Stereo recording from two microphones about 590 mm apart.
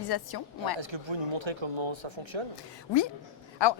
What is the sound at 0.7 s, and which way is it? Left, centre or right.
Speech, right.